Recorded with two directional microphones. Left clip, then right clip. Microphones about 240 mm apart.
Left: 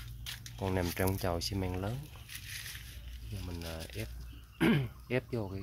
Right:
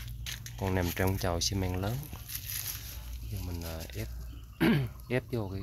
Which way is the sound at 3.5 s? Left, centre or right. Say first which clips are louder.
Right 1 dB; centre.